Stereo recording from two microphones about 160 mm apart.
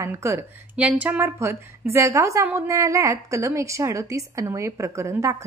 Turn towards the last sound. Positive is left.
turn(degrees=-20)  # may be behind; listen again after turning